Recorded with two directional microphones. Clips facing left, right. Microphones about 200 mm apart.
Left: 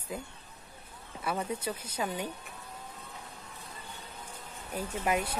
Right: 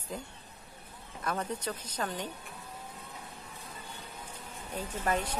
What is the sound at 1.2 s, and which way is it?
A woman's voice, 10° left (ahead or behind).